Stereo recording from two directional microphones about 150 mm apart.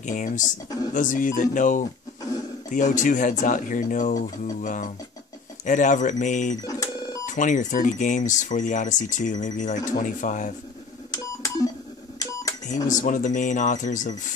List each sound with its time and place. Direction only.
0.0 s speech: 60° left (ahead or behind)
6.6 s speech: 25° left (ahead or behind)
7.2 s speech: 60° left (ahead or behind)
11.1 s a sound: 25° left (ahead or behind)
12.6 s speech: 55° left (ahead or behind)